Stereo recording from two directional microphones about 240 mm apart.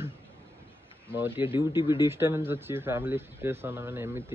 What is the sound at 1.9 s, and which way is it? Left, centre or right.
A man's voice, centre.